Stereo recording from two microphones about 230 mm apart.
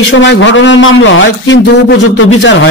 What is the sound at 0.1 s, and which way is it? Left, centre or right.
A man's voice, left.